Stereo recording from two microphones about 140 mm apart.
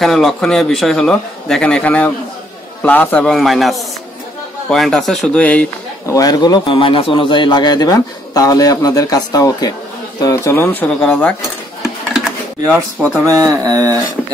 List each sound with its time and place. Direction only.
0.0 s speech: centre (ahead or behind)
6.0 s a man's voice: 25° left (ahead or behind); by 11.3 s 5° left (ahead or behind)
13.2 s speech: 25° right (ahead or behind)